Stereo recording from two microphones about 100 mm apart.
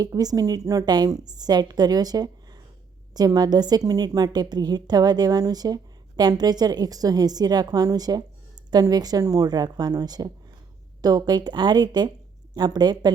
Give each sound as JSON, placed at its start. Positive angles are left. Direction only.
{"t": 0.0, "sound": "a woman's voice", "side_deg": -40}